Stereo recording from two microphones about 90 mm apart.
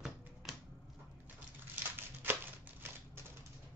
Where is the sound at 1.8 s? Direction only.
20° right (ahead or behind).